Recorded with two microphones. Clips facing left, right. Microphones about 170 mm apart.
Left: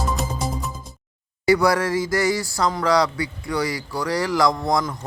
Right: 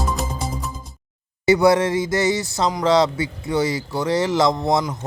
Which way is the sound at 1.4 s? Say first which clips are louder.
Right 3 dB; 20° right (ahead or behind).